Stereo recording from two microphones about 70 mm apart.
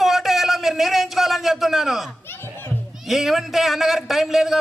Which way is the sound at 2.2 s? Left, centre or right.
Left.